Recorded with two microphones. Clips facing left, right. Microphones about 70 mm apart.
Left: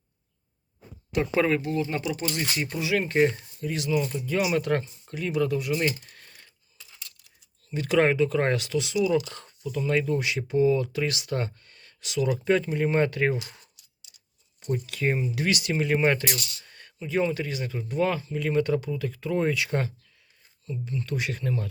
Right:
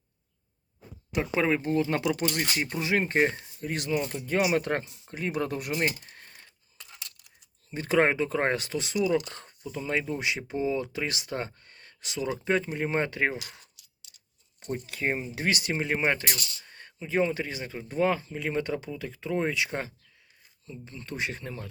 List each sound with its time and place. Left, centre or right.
1.1 s speech: centre
1.6 s speech: right
2.0 s speech: right
2.3 s speech: right
3.6 s speech: right
6.1 s a sound: right
6.7 s a sound: right
7.7 s speech: right
9.5 s speech: right
14.6 s speech: right